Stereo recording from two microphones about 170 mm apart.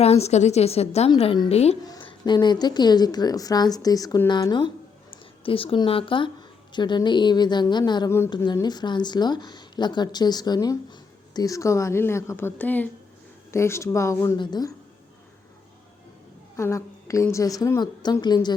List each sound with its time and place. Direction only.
0.0 s a woman's voice: 35° left (ahead or behind)
1.8 s a woman's voice: 25° left (ahead or behind)
16.6 s a woman's voice: 15° left (ahead or behind)